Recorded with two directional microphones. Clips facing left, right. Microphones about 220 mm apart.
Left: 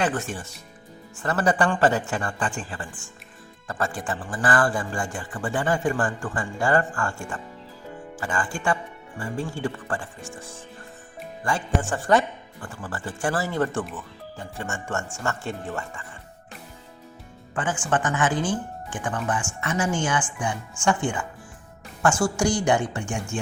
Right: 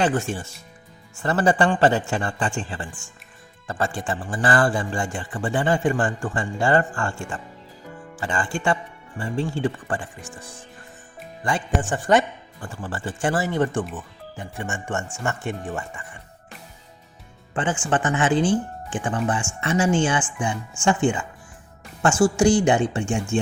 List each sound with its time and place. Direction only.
0.0 s speech: 30° right (ahead or behind)
11.4 s speech: 20° right (ahead or behind)
17.5 s speech: 25° right (ahead or behind)